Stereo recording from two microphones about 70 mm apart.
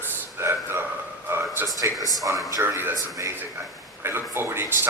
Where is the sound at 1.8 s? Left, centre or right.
Right.